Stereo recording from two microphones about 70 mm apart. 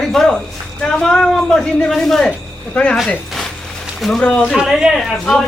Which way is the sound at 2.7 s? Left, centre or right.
Centre.